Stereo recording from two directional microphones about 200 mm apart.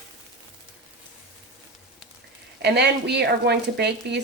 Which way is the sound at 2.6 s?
55° right (ahead or behind).